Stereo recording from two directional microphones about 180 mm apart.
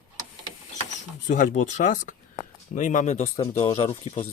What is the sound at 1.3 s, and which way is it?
Speech, 45° left (ahead or behind).